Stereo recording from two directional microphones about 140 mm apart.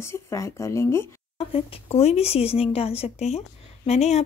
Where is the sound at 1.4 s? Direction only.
45° left (ahead or behind).